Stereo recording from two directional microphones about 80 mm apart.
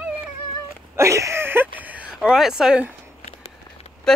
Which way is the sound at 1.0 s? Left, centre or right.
Right.